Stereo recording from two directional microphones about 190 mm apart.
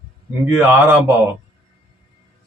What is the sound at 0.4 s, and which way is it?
Speech, 10° right (ahead or behind).